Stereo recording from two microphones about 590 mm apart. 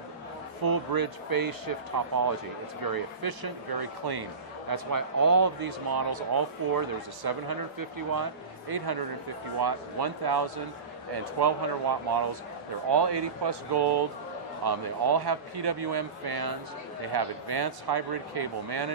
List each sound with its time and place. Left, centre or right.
0.7 s speech: right